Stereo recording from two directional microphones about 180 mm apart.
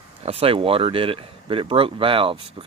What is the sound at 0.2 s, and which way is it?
Speech, 35° right (ahead or behind).